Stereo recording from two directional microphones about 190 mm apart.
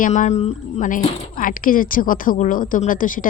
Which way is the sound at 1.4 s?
45° left (ahead or behind).